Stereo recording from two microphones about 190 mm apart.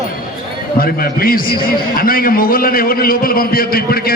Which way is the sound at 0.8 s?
50° left (ahead or behind).